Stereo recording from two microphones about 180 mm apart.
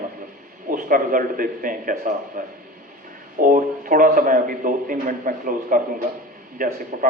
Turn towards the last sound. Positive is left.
turn(degrees=-50)  # may be behind; listen again after turning